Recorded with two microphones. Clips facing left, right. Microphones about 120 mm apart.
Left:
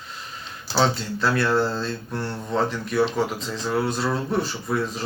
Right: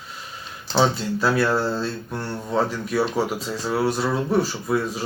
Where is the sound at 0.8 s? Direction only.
10° right (ahead or behind).